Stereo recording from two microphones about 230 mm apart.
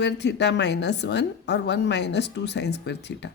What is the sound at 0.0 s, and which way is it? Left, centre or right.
A woman's voice, left.